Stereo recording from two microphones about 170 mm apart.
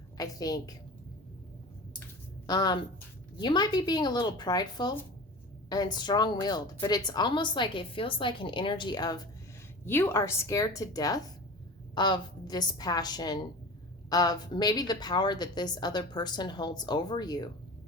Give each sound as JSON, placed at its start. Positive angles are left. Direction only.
{"t": 0.2, "sound": "speech", "side_deg": 20}
{"t": 2.5, "sound": "speech", "side_deg": 25}
{"t": 9.8, "sound": "speech", "side_deg": 15}